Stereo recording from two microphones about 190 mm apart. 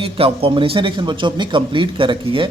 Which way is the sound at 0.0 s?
30° right (ahead or behind).